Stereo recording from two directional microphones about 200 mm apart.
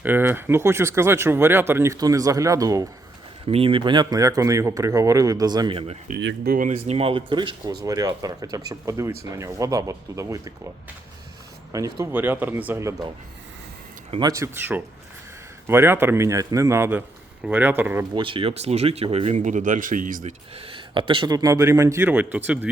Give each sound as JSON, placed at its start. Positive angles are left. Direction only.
{"t": 0.0, "sound": "speech", "side_deg": -10}
{"t": 3.4, "sound": "speech", "side_deg": -30}
{"t": 6.1, "sound": "speech", "side_deg": -55}
{"t": 11.7, "sound": "speech", "side_deg": -15}
{"t": 14.1, "sound": "speech", "side_deg": -20}
{"t": 18.1, "sound": "speech", "side_deg": -25}
{"t": 20.6, "sound": "speech", "side_deg": -25}